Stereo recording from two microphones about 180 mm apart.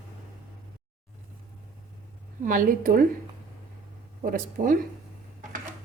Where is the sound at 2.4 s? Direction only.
50° right (ahead or behind).